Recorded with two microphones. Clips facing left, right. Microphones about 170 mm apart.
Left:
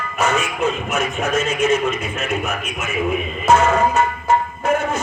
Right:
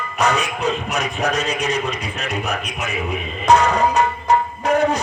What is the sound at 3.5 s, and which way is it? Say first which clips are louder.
Music: even; 35° right (ahead or behind).